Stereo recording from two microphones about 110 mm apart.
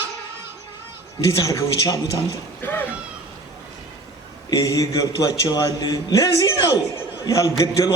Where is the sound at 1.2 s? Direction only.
30° left (ahead or behind).